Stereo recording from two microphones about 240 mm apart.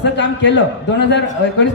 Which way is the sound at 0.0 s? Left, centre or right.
Left.